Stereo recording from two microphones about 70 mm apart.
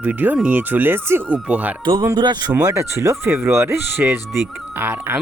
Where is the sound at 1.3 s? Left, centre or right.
Right.